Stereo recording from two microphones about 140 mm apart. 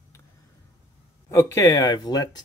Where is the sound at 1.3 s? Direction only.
20° left (ahead or behind).